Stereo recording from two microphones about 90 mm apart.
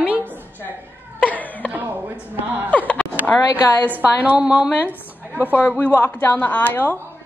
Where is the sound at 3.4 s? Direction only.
45° left (ahead or behind).